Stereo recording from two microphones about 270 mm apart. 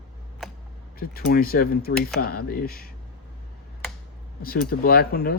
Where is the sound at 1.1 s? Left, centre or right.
Left.